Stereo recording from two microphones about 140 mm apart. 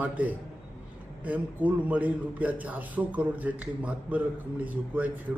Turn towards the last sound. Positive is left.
turn(degrees=-10)  # may be behind; listen again after turning